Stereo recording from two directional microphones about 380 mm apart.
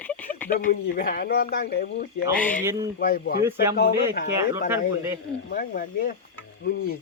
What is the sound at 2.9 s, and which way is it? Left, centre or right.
Speech, left.